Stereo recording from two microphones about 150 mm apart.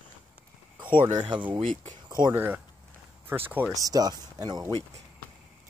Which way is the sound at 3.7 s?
25° right (ahead or behind).